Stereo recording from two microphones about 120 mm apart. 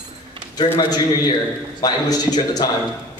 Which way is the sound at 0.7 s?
35° left (ahead or behind).